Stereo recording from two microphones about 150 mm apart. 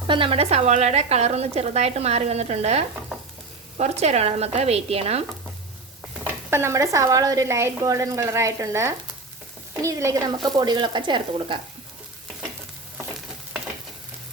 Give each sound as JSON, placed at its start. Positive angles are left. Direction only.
{"t": 0.1, "sound": "a woman's voice", "side_deg": -35}
{"t": 6.5, "sound": "a woman's voice", "side_deg": -15}